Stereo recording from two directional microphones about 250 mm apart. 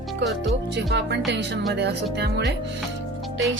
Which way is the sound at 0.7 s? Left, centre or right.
Right.